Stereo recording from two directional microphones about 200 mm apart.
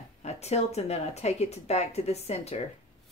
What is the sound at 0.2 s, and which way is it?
Speech, 35° left (ahead or behind).